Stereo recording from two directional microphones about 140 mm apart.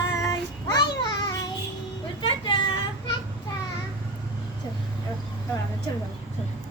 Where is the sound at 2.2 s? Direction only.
35° left (ahead or behind).